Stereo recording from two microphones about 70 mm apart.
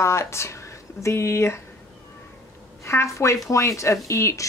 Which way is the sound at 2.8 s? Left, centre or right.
Left.